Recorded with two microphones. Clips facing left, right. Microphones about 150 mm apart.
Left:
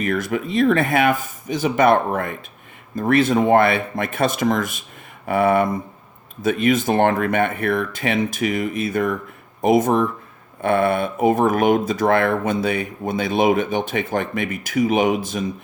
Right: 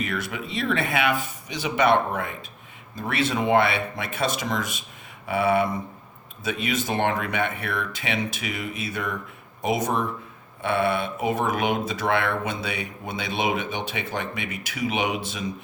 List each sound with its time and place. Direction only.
0.0 s speech: 45° left (ahead or behind)